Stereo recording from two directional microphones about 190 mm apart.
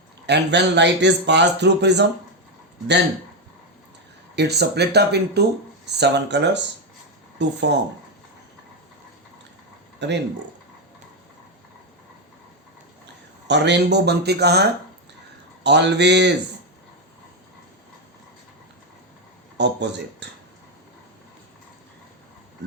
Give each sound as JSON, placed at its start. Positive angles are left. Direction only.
{"t": 0.3, "sound": "speech", "side_deg": -65}
{"t": 4.4, "sound": "speech", "side_deg": -60}
{"t": 10.0, "sound": "speech", "side_deg": -65}
{"t": 13.5, "sound": "speech", "side_deg": -65}
{"t": 19.5, "sound": "speech", "side_deg": -65}